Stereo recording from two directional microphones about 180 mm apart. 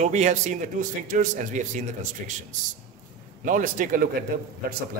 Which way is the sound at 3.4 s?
45° right (ahead or behind).